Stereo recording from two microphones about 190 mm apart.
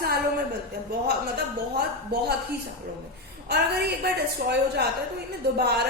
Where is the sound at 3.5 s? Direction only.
55° right (ahead or behind).